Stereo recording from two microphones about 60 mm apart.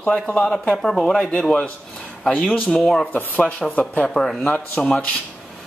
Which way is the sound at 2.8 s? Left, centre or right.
Centre.